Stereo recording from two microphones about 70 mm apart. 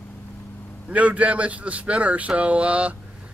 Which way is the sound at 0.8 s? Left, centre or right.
Centre.